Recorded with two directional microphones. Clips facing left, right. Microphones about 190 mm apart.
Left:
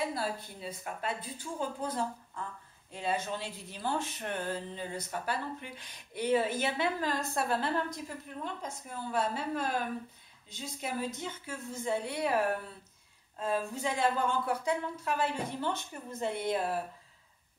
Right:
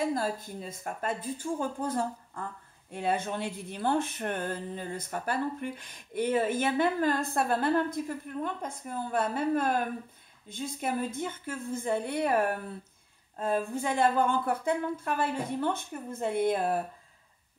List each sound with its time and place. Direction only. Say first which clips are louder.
0.0 s speech: right 4 dB; 45° right (ahead or behind)
13.4 s speech: right 3 dB; 55° right (ahead or behind)